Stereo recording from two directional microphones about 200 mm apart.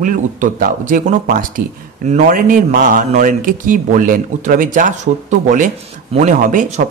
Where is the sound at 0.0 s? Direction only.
40° right (ahead or behind).